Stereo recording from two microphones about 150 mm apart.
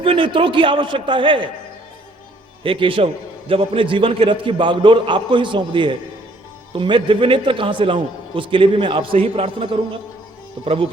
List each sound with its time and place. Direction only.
0.0 s a man's voice: 35° right (ahead or behind)
2.6 s a man's voice: 35° right (ahead or behind)